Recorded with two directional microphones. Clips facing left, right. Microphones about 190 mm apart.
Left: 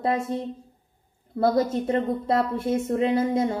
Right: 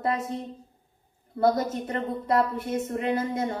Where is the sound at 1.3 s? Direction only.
25° left (ahead or behind).